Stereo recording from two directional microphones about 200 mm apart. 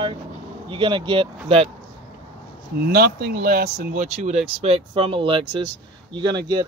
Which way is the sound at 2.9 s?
50° right (ahead or behind).